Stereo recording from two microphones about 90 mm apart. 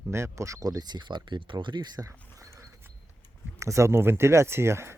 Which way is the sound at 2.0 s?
40° right (ahead or behind).